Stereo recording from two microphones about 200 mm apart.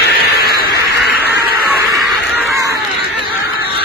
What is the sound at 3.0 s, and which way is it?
Honk, 50° left (ahead or behind).